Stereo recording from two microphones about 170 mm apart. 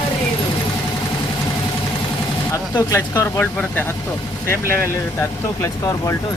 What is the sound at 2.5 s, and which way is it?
Speech, 20° left (ahead or behind).